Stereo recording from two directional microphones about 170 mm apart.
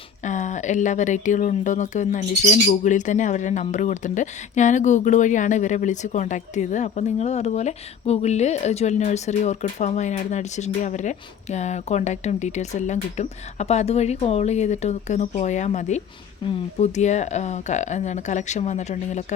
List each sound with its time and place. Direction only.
0.3 s speech: 45° left (ahead or behind)